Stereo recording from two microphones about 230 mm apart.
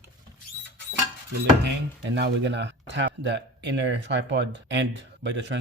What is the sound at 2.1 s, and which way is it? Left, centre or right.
Speech, right.